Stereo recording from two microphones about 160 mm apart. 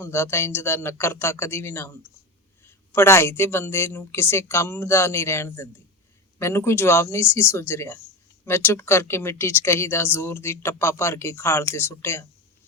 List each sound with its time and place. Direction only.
0.0 s speech: 15° left (ahead or behind)